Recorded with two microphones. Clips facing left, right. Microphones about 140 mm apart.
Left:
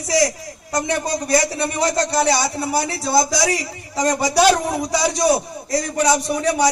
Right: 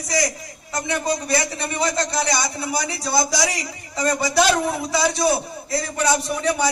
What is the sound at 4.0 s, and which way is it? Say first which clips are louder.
A man's voice: left 2 dB; 35° left (ahead or behind).